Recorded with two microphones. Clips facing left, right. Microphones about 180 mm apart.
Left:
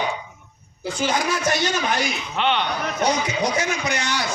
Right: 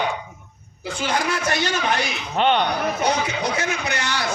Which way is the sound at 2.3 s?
45° right (ahead or behind).